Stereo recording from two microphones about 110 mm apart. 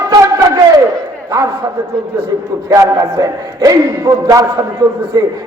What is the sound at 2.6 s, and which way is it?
A man's voice, 35° right (ahead or behind).